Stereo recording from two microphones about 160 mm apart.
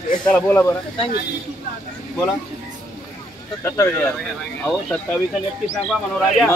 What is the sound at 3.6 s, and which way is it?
Speech, 15° left (ahead or behind).